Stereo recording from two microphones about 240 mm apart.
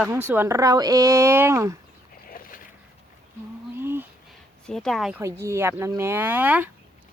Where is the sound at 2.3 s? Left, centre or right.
Left.